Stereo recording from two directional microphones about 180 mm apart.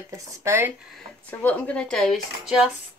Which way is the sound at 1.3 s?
10° left (ahead or behind).